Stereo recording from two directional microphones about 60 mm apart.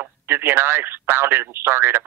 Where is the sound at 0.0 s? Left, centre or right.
Right.